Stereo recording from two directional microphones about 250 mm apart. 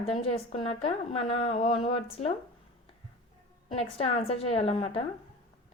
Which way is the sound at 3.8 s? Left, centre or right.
Left.